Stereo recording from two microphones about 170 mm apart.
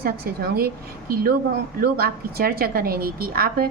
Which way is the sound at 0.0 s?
65° right (ahead or behind).